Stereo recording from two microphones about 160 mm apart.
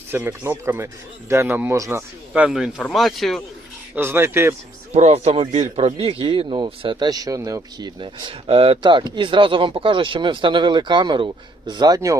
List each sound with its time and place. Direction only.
0.1 s a man's voice: 15° right (ahead or behind); by 3.4 s centre (ahead or behind)
3.9 s a man's voice: 15° right (ahead or behind)
4.9 s speech: 40° right (ahead or behind); by 12.1 s 20° right (ahead or behind)